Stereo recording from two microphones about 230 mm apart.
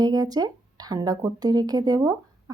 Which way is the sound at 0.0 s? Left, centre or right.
Centre.